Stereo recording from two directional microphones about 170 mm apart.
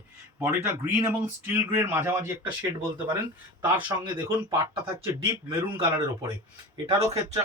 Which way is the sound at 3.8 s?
30° right (ahead or behind).